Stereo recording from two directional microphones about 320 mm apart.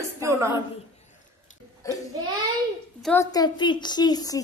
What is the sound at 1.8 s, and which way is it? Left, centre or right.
Speech, centre.